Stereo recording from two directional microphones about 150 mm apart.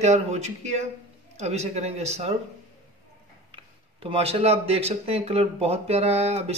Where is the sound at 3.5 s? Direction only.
35° right (ahead or behind).